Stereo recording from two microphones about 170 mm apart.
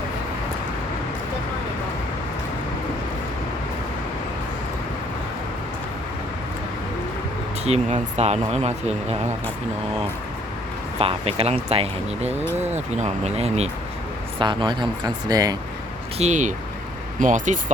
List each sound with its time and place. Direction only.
7.6 s speech: 40° right (ahead or behind)
11.0 s speech: 35° right (ahead or behind)
14.3 s speech: 25° right (ahead or behind)
16.1 s speech: 45° right (ahead or behind)